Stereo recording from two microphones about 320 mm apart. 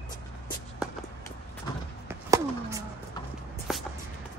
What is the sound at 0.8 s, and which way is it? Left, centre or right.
Walk, centre.